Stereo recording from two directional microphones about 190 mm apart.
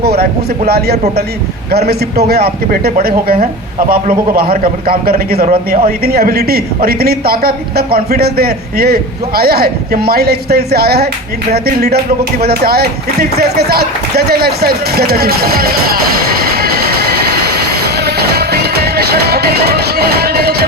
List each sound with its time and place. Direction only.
0.0 s a man's voice: 55° right (ahead or behind)
16.2 s music: 55° right (ahead or behind)
18.0 s music: 60° right (ahead or behind)